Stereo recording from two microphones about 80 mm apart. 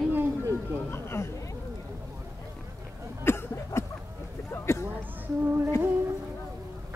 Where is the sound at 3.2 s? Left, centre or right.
Left.